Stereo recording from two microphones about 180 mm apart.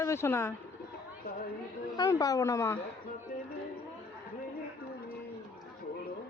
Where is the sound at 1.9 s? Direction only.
20° left (ahead or behind).